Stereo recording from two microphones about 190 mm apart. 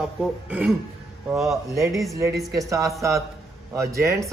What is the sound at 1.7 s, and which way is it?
Speech, 15° right (ahead or behind).